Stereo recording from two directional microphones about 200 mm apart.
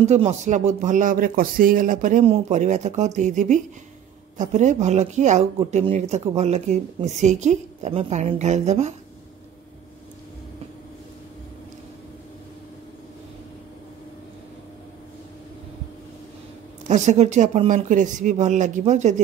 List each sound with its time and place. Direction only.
0.0 s a woman's voice: 35° right (ahead or behind)
16.8 s a woman's voice: 35° right (ahead or behind)